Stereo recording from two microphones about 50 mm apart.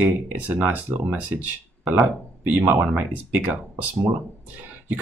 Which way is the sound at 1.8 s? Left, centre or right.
Centre.